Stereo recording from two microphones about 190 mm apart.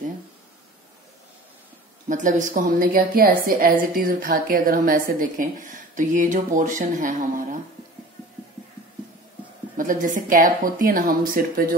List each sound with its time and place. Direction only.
2.0 s a woman's voice: 45° right (ahead or behind)
9.8 s a woman's voice: 45° right (ahead or behind)